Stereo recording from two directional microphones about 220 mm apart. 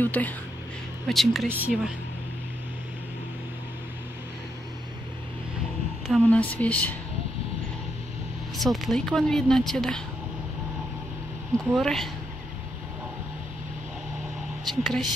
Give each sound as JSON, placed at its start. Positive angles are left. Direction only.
{"t": 0.0, "sound": "a woman's voice", "side_deg": 5}
{"t": 6.0, "sound": "speech", "side_deg": 5}
{"t": 8.5, "sound": "a woman's voice", "side_deg": 0}
{"t": 11.5, "sound": "a woman's voice", "side_deg": 0}
{"t": 14.7, "sound": "a woman's voice", "side_deg": 0}